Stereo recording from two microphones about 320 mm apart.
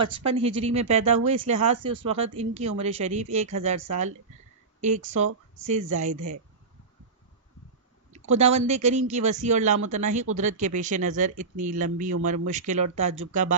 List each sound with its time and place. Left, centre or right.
0.0 s speech: centre
4.8 s speech: right
8.1 s speech: centre